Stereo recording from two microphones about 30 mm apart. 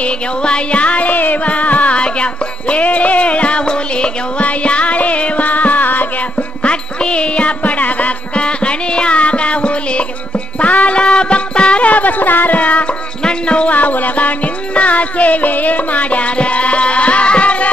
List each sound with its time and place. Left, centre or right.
0.4 s music: left
1.4 s carnatic music: left
2.0 s music: left
2.8 s music: left
4.4 s music: left
6.6 s music: left
8.4 s music: left
10.6 s music: left
11.0 s music: left
11.8 s music: left
12.5 s music: left
13.2 s basketball bounce: left
13.7 s music: left